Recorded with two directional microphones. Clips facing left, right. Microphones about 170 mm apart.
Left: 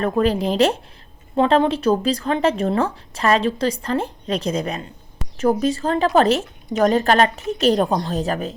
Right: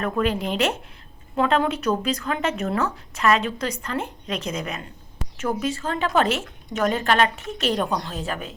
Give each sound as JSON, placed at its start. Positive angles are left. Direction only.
{"t": 0.0, "sound": "speech", "side_deg": 35}